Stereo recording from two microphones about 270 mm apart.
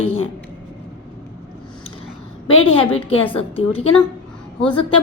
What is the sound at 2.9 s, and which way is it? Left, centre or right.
Speech, left.